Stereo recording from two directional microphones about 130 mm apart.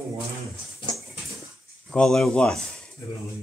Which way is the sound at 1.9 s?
5° left (ahead or behind).